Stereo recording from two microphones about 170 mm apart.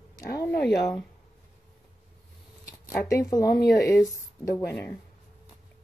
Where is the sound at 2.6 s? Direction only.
20° left (ahead or behind).